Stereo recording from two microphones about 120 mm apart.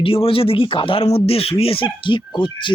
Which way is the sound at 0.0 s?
50° left (ahead or behind).